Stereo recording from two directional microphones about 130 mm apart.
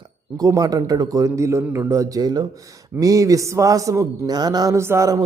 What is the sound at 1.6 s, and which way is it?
Speech, 10° right (ahead or behind).